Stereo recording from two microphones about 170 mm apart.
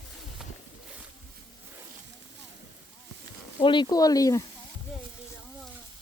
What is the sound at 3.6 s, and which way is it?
Speech, 30° left (ahead or behind).